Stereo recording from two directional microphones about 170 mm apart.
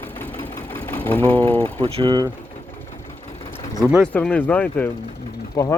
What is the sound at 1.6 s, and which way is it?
Speech, 35° right (ahead or behind).